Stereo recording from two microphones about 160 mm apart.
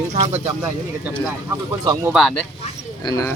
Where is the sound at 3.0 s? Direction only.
25° left (ahead or behind).